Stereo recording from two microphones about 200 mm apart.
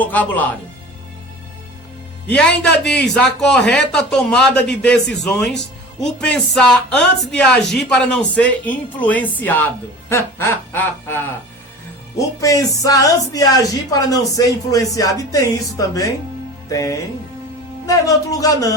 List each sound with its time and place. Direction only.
0.0 s speech: 10° left (ahead or behind)
2.2 s speech: 5° left (ahead or behind)
17.8 s speech: 15° left (ahead or behind)